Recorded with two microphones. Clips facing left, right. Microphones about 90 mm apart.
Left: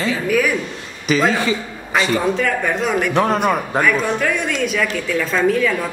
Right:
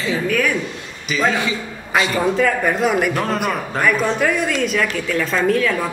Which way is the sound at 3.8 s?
5° right (ahead or behind).